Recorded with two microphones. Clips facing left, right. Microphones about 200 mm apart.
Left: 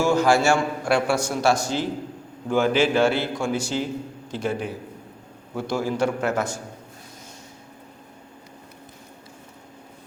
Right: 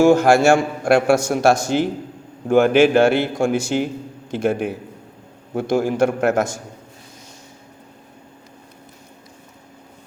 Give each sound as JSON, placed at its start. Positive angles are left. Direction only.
{"t": 0.0, "sound": "a man's voice", "side_deg": -50}
{"t": 2.5, "sound": "a man's voice", "side_deg": -60}